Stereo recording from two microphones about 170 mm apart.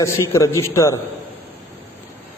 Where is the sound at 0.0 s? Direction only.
15° left (ahead or behind).